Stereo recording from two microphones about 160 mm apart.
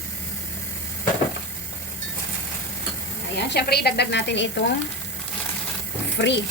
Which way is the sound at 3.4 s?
85° left.